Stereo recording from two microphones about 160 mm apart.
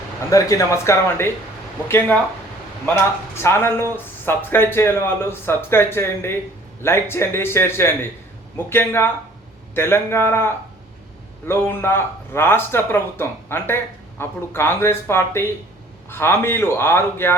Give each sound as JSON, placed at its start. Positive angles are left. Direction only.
{"t": 0.3, "sound": "speech", "side_deg": 20}